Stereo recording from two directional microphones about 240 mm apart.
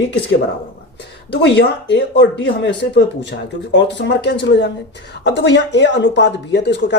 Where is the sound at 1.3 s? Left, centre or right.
Left.